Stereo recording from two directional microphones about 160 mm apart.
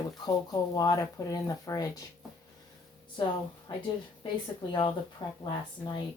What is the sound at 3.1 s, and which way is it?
Speech, 30° left (ahead or behind).